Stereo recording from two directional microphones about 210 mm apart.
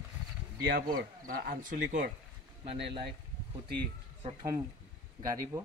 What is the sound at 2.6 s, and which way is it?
Speech, 25° right (ahead or behind).